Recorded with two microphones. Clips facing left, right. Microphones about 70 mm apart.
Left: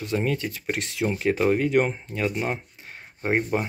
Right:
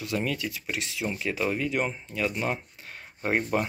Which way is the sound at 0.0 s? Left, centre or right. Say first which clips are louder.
Left 4 dB; left.